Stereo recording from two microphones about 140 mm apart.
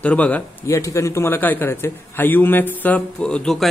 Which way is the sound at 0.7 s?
20° left (ahead or behind).